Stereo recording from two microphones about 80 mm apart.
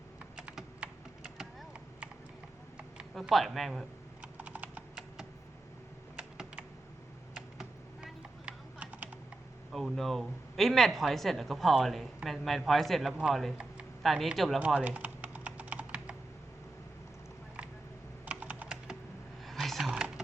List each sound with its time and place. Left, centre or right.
1.4 s a sound: centre
3.2 s speech: centre
4.2 s computer keyboard: centre
6.1 s computer keyboard: centre
7.3 s typing: centre
9.7 s speech: centre
14.8 s typing: centre
18.3 s typing: centre
19.5 s a sound: centre
19.9 s a sound: centre